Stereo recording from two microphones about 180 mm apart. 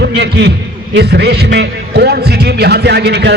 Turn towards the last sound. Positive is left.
turn(degrees=-70)  # may be behind; listen again after turning